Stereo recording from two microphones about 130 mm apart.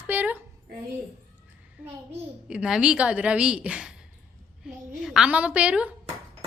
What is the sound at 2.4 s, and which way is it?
A woman's voice, 5° right (ahead or behind).